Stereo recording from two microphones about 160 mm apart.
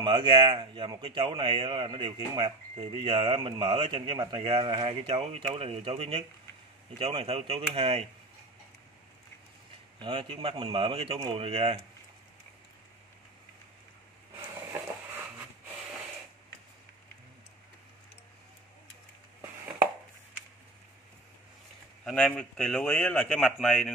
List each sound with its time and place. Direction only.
0.0 s speech: 30° right (ahead or behind)
9.9 s speech: 30° right (ahead or behind)
14.7 s a sound: 10° right (ahead or behind)
22.0 s a man's voice: 5° left (ahead or behind)